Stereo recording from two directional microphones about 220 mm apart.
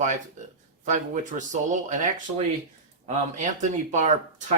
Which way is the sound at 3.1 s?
35° right (ahead or behind).